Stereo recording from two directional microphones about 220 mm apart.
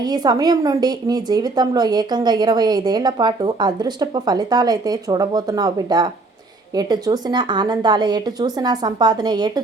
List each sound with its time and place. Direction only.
0.0 s a woman's voice: 20° right (ahead or behind)